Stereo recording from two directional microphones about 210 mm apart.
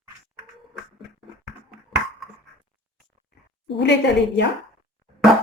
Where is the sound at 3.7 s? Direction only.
55° left (ahead or behind).